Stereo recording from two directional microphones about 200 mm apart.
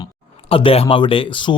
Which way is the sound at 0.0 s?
25° left (ahead or behind).